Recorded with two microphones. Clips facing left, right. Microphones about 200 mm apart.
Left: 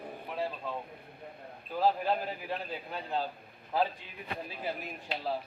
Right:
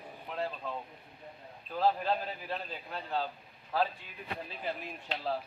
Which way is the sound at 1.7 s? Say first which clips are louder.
Left 1 dB; 10° left (ahead or behind).